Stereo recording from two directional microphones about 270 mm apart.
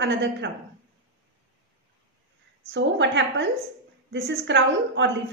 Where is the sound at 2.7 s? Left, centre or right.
Right.